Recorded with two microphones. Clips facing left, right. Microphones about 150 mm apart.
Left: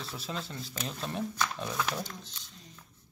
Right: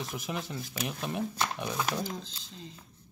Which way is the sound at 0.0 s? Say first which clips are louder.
Right 3 dB; 15° right (ahead or behind).